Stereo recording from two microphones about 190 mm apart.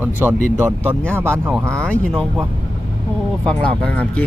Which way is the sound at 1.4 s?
10° right (ahead or behind).